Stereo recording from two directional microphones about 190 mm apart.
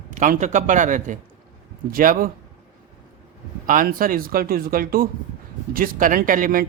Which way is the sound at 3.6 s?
45° right (ahead or behind).